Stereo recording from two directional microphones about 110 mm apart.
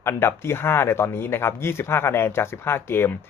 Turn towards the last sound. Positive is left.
turn(degrees=20)  # may be behind; listen again after turning